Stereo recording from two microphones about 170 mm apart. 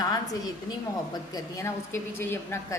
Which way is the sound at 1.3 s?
15° left (ahead or behind).